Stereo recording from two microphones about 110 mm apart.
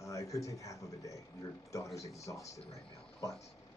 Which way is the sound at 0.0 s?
30° left (ahead or behind).